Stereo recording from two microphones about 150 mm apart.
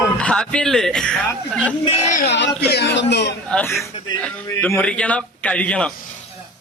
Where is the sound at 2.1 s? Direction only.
90° left.